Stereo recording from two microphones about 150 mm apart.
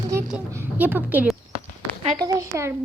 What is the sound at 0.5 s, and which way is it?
Speech, 15° right (ahead or behind).